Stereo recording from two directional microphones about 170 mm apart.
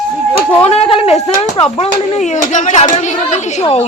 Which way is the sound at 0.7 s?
30° left (ahead or behind).